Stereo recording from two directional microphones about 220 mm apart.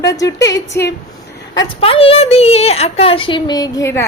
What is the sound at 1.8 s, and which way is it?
Speech, 25° left (ahead or behind).